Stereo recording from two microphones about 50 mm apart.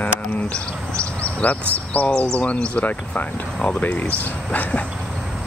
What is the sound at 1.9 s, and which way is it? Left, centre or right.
Speech, left.